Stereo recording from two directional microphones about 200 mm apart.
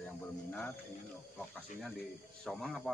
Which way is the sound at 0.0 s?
10° left (ahead or behind).